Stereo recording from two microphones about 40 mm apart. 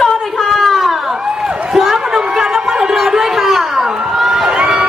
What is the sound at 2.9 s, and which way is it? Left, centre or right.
Run, centre.